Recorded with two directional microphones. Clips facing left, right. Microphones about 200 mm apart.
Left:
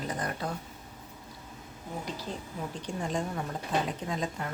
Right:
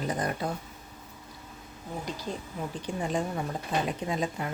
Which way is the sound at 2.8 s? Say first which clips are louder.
Right 3 dB; 5° right (ahead or behind).